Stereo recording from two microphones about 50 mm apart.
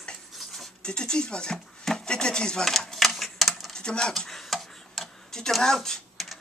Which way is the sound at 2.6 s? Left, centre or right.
Centre.